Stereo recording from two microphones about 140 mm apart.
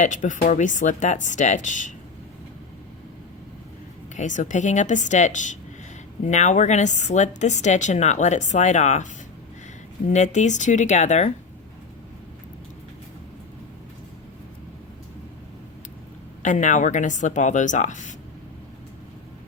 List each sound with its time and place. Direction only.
0.0 s a woman's voice: 65° left (ahead or behind)
4.1 s a woman's voice: 60° left (ahead or behind)
10.1 s a woman's voice: 55° left (ahead or behind)
16.4 s a woman's voice: 60° left (ahead or behind)